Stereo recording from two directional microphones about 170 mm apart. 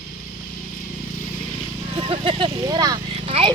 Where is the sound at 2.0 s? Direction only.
30° right (ahead or behind).